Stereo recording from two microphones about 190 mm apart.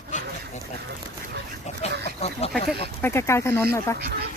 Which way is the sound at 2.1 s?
35° left (ahead or behind).